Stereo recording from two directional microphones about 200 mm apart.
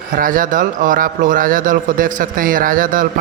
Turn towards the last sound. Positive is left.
turn(degrees=-40)  # may be behind; listen again after turning